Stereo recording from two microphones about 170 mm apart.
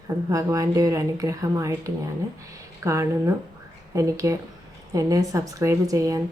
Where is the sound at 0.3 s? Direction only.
20° right (ahead or behind).